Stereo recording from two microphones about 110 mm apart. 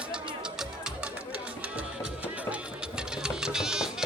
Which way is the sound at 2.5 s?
5° right (ahead or behind).